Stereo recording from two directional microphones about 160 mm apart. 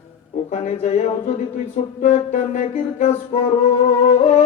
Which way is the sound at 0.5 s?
45° left (ahead or behind).